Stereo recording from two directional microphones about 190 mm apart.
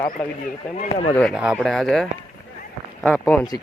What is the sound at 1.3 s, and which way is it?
Speech, 5° right (ahead or behind).